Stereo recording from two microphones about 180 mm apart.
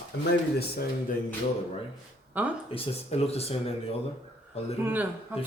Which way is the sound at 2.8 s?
35° left (ahead or behind).